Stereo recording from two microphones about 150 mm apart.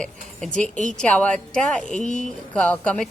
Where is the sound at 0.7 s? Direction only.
55° left (ahead or behind).